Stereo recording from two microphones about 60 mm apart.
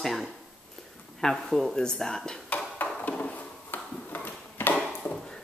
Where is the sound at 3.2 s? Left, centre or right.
Left.